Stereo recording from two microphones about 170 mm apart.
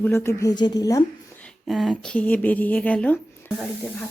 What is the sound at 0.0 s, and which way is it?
A woman's voice, 15° left (ahead or behind).